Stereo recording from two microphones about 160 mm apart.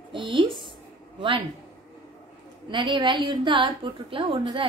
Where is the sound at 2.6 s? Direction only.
30° right (ahead or behind).